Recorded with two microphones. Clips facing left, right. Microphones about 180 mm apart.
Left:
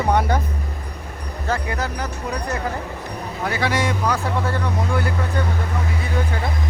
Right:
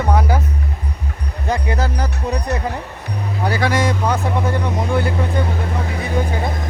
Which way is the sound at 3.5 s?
45° right (ahead or behind).